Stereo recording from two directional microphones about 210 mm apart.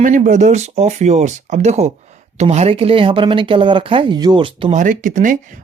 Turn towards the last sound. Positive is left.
turn(degrees=-40)  # may be behind; listen again after turning